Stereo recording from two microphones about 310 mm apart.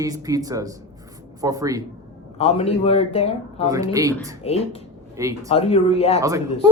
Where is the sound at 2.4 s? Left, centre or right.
Centre.